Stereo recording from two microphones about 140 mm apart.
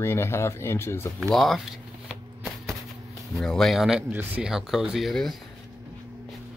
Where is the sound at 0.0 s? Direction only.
15° left (ahead or behind).